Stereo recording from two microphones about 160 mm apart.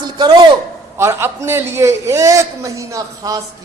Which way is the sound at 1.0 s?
15° right (ahead or behind).